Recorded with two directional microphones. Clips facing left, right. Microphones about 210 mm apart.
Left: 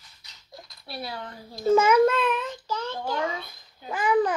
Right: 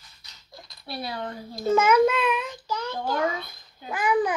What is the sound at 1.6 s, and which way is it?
Speech, 10° left (ahead or behind).